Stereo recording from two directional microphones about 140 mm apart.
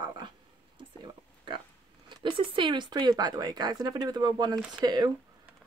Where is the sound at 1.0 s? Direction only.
35° right (ahead or behind).